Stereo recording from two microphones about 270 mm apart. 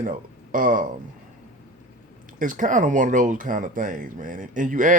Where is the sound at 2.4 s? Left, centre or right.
Right.